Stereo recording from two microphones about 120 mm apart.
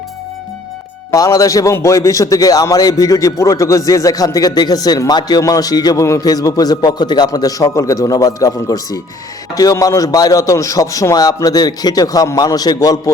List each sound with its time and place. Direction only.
1.1 s a man's voice: 30° left (ahead or behind)